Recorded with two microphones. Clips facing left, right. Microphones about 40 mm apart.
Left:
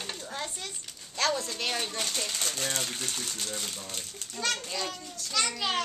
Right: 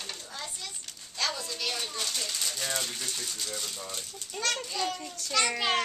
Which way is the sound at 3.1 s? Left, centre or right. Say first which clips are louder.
Left 1 dB; left.